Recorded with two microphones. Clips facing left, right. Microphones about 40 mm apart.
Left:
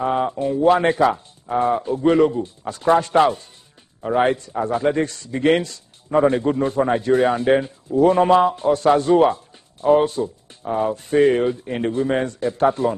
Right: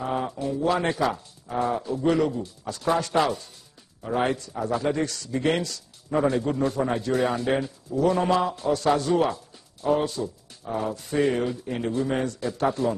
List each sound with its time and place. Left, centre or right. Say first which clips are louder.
0.0 s a man's voice: left 7 dB; left